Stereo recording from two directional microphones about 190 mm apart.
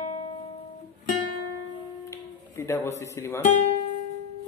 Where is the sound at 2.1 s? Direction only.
15° left (ahead or behind).